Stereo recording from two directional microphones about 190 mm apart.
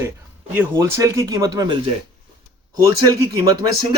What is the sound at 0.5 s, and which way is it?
Speech, 10° right (ahead or behind).